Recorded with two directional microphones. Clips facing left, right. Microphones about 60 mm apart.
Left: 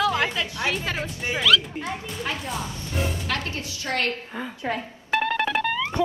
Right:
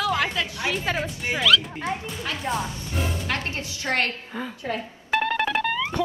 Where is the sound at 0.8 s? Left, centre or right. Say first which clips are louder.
Right 2 dB; right.